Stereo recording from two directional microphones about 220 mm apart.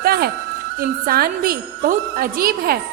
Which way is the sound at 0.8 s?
45° right (ahead or behind).